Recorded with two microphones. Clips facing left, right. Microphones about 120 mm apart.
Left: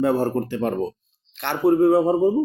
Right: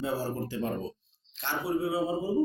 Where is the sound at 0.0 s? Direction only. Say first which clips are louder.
Left 11 dB; 60° left (ahead or behind).